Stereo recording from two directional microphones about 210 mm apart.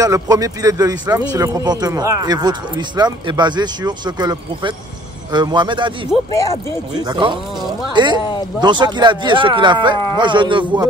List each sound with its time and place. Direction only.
0.0 s speech: 15° right (ahead or behind)
7.0 s speech: 20° right (ahead or behind)